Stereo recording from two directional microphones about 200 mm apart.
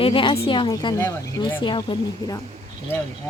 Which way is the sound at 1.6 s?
25° left (ahead or behind).